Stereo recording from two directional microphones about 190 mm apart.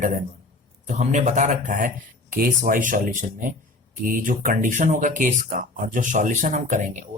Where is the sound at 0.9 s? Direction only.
40° right (ahead or behind).